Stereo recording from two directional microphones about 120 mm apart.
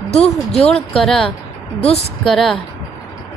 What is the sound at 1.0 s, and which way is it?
A woman's voice, 5° left (ahead or behind).